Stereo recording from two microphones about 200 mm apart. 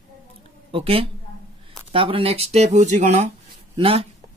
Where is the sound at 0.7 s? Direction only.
30° right (ahead or behind).